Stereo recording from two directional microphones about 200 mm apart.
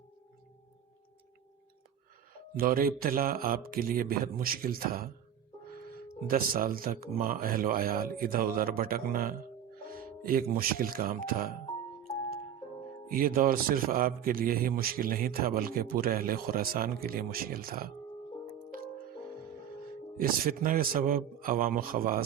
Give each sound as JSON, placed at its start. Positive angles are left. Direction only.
{"t": 2.6, "sound": "a man's voice", "side_deg": -45}
{"t": 6.2, "sound": "a man's voice", "side_deg": -45}
{"t": 13.1, "sound": "a man's voice", "side_deg": -45}
{"t": 20.1, "sound": "a man's voice", "side_deg": -45}